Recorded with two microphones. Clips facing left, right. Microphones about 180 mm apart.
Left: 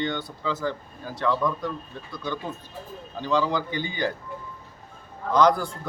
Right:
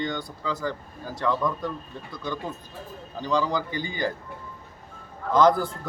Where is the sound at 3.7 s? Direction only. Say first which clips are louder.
Left 1 dB; 20° left (ahead or behind).